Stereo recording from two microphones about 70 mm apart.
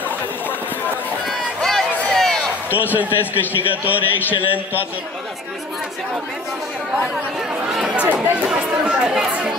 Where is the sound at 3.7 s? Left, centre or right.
Right.